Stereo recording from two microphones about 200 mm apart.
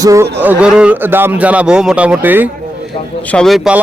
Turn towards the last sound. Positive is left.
turn(degrees=0)  # may be behind; listen again after turning